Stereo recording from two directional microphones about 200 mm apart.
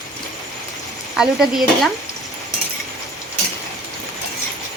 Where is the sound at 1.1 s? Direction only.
Centre (ahead or behind).